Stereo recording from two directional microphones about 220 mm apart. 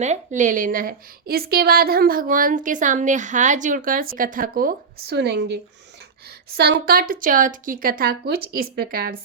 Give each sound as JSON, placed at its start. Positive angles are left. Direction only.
{"t": 0.0, "sound": "a woman's voice", "side_deg": -30}
{"t": 6.6, "sound": "a woman's voice", "side_deg": -45}